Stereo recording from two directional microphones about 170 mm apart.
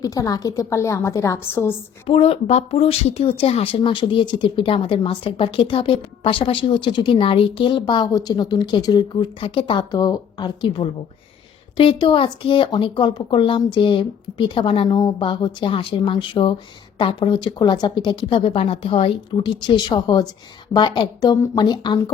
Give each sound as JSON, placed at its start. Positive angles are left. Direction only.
{"t": 0.0, "sound": "speech", "side_deg": 20}
{"t": 2.0, "sound": "speech", "side_deg": 35}